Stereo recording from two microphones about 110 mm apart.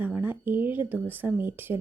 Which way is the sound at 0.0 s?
15° right (ahead or behind).